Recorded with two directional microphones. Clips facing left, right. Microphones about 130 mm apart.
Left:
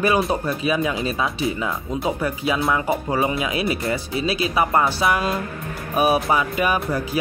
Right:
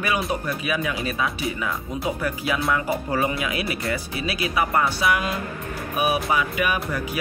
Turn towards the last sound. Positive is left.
turn(degrees=30)  # may be behind; listen again after turning